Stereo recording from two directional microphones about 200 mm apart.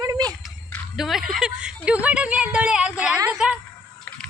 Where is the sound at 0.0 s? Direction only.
20° right (ahead or behind).